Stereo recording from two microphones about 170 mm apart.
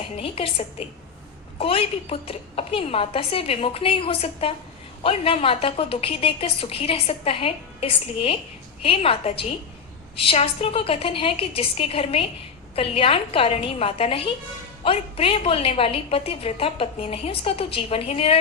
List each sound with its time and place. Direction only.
0.2 s a woman's voice: 35° left (ahead or behind)